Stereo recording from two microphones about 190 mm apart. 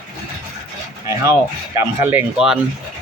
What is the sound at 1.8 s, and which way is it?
Speech, 10° right (ahead or behind).